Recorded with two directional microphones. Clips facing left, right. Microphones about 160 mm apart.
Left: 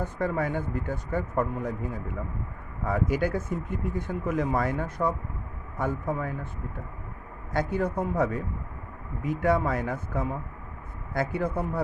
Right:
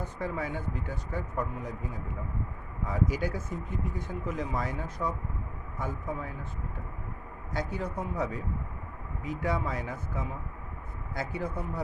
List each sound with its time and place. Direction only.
0.0 s speech: 55° left (ahead or behind)
2.8 s speech: 55° left (ahead or behind)
7.5 s speech: 55° left (ahead or behind)